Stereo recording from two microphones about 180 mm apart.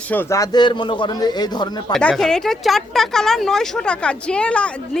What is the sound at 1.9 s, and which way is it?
Speech, 5° left (ahead or behind).